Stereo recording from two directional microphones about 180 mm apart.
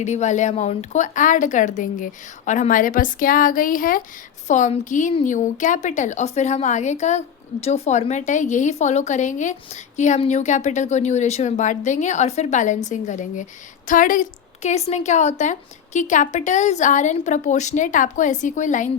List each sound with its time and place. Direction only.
0.0 s a woman's voice: 40° left (ahead or behind)